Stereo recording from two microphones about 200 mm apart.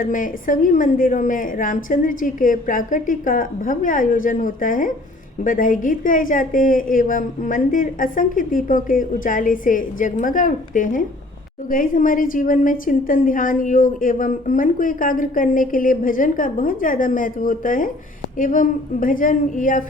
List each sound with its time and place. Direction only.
0.0 s a woman's voice: 40° left (ahead or behind)